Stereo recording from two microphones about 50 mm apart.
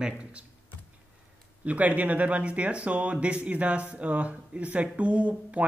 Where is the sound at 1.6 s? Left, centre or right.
Right.